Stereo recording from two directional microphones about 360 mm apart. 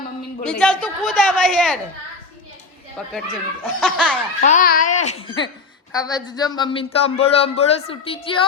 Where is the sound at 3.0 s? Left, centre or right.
Centre.